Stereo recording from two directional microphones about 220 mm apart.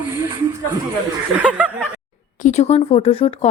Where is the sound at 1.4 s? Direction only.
5° right (ahead or behind).